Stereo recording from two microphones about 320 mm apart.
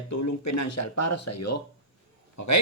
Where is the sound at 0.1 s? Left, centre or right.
Left.